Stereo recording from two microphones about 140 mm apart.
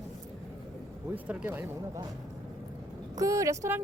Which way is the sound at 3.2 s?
25° right (ahead or behind).